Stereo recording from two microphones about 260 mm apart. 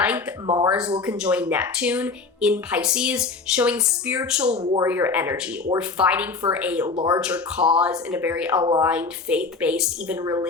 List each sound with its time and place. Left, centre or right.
0.0 s speech: centre
6.9 s speech: centre
7.2 s speech: centre
8.6 s speech: centre
8.9 s speech: centre